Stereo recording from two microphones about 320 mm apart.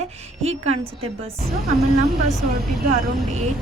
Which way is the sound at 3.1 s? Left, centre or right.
Right.